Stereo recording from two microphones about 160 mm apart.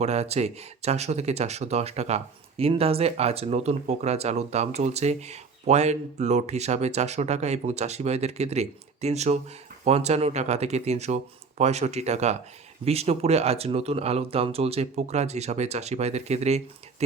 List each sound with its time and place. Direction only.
0.0 s speech: 45° right (ahead or behind)